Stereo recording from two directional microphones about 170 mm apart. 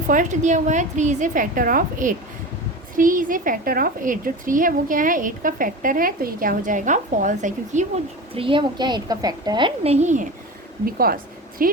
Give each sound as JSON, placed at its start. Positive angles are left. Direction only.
{"t": 0.1, "sound": "a woman's voice", "side_deg": -50}
{"t": 8.4, "sound": "a woman's voice", "side_deg": -30}
{"t": 10.8, "sound": "a woman's voice", "side_deg": -60}